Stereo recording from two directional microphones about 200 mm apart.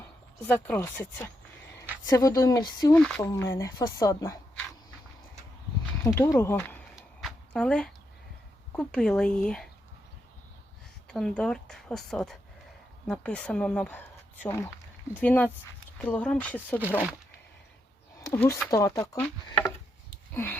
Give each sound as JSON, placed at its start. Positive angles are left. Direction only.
{"t": 0.4, "sound": "speech", "side_deg": 10}
{"t": 6.1, "sound": "speech", "side_deg": 15}
{"t": 6.9, "sound": "a sound", "side_deg": 0}
{"t": 8.7, "sound": "speech", "side_deg": 5}
{"t": 11.1, "sound": "speech", "side_deg": 5}
{"t": 18.2, "sound": "speech", "side_deg": 10}
{"t": 20.3, "sound": "a sound", "side_deg": 10}